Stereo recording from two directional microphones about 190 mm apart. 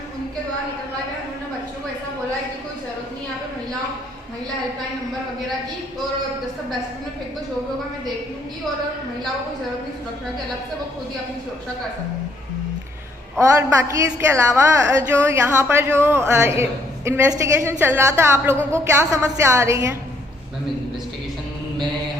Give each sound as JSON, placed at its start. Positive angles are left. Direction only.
{"t": 13.6, "sound": "a woman's voice", "side_deg": -15}